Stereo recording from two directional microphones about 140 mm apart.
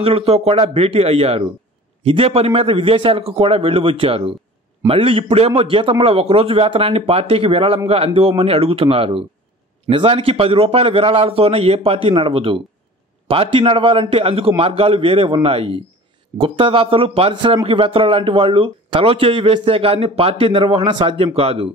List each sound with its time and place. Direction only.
0.0 s a man's voice: 45° right (ahead or behind)